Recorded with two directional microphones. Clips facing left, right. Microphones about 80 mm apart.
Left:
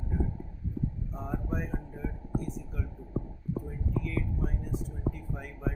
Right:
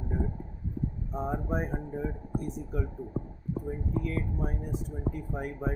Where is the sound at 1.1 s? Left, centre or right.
Right.